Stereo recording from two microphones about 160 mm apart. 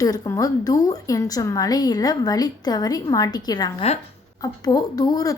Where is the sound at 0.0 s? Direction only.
20° left (ahead or behind).